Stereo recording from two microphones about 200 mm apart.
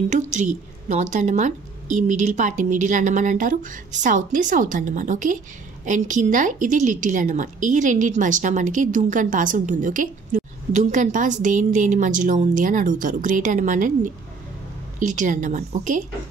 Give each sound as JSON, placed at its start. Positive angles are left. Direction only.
{"t": 0.1, "sound": "a woman's voice", "side_deg": -35}